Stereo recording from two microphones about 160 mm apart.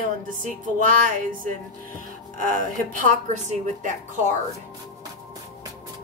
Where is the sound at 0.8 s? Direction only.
60° right (ahead or behind).